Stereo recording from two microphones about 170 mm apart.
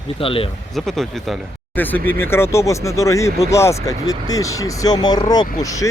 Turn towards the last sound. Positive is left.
turn(degrees=20)  # may be behind; listen again after turning